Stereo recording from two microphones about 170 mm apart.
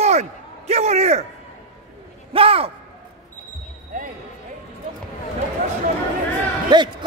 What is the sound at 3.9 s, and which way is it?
Basketball bounce, 50° right (ahead or behind).